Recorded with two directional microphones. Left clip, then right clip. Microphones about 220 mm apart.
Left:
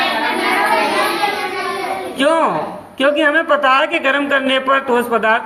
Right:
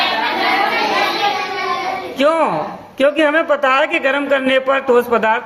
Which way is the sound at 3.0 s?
25° right (ahead or behind).